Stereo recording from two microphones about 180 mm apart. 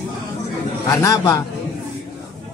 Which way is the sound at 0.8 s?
15° left (ahead or behind).